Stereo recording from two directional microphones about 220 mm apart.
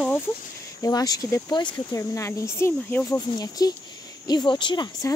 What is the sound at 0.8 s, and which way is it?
Speech, 15° left (ahead or behind).